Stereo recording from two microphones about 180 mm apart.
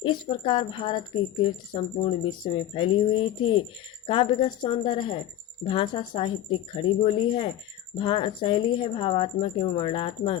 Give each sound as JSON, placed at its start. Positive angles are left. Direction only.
{"t": 0.0, "sound": "speech", "side_deg": 30}